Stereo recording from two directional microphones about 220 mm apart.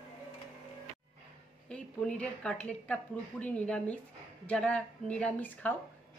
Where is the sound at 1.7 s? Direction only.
5° left (ahead or behind).